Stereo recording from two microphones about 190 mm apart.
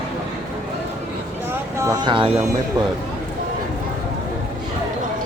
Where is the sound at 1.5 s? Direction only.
15° right (ahead or behind).